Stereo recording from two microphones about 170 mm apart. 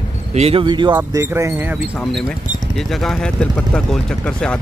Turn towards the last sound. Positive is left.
turn(degrees=5)  # may be behind; listen again after turning